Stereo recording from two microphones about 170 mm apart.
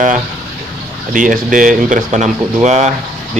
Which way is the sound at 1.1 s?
50° right (ahead or behind).